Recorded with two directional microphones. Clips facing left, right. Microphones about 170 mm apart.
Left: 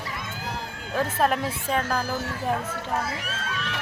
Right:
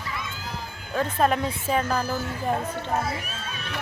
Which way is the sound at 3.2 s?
90° left.